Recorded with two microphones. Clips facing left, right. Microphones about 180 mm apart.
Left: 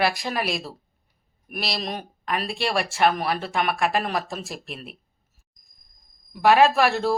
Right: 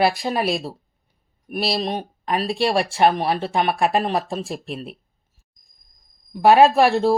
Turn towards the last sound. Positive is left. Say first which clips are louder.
# right 5 dB
turn(degrees=-30)  # may be behind; listen again after turning